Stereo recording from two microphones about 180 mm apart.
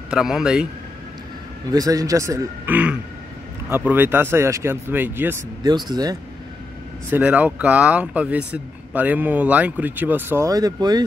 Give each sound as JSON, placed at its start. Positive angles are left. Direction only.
{"t": 0.1, "sound": "a man's voice", "side_deg": -5}
{"t": 1.7, "sound": "speech", "side_deg": -20}
{"t": 7.1, "sound": "speech", "side_deg": -10}